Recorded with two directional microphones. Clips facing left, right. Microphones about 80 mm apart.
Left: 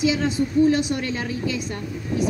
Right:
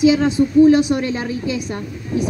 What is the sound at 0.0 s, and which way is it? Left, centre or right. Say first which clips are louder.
A woman's voice: right 7 dB; centre.